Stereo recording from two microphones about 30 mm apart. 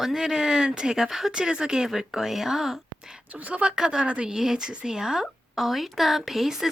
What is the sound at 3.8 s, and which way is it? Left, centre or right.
Speech, right.